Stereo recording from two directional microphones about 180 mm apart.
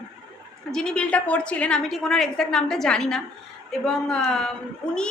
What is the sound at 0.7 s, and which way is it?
A woman's voice, 5° left (ahead or behind).